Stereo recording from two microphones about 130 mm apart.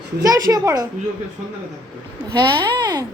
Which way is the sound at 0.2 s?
25° right (ahead or behind).